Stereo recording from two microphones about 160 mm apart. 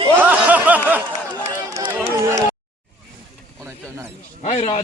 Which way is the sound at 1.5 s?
25° right (ahead or behind).